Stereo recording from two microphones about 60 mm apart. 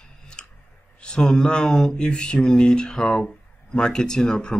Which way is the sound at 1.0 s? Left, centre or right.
Centre.